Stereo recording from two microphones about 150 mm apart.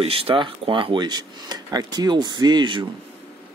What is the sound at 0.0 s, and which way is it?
Speech, 40° right (ahead or behind).